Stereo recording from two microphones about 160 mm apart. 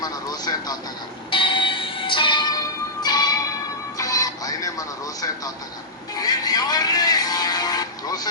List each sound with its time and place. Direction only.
0.0 s vehicle: 25° left (ahead or behind)
1.3 s church bell: 30° left (ahead or behind)
3.9 s music: 20° left (ahead or behind)
6.1 s vehicle: 25° left (ahead or behind)